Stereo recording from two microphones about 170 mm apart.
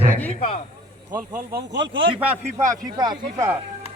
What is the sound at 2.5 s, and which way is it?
Speech, 20° right (ahead or behind).